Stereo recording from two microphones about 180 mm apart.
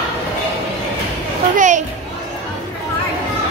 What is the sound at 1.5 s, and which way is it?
Speech, 45° right (ahead or behind).